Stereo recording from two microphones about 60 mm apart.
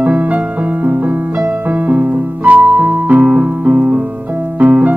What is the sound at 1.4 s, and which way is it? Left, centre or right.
Electric piano, right.